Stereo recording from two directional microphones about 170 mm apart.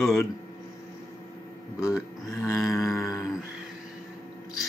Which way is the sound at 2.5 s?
Centre (ahead or behind).